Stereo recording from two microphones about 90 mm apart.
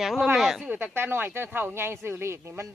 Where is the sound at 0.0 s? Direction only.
Centre (ahead or behind).